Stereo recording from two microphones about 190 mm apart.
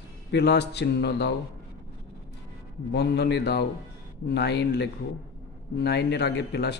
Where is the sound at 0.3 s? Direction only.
60° left (ahead or behind).